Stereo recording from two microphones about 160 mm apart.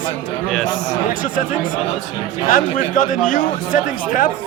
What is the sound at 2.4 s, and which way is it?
Speech, 55° left (ahead or behind).